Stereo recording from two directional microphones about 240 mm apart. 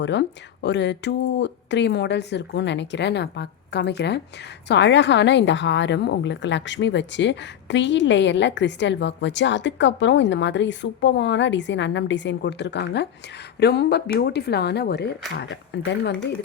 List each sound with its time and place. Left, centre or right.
0.0 s speech: left